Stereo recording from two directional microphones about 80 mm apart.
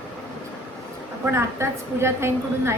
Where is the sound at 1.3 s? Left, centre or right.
Right.